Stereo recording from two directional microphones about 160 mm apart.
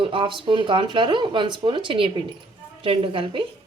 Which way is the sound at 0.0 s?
35° right (ahead or behind).